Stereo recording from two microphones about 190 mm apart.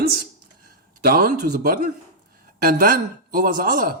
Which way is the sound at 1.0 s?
50° right (ahead or behind).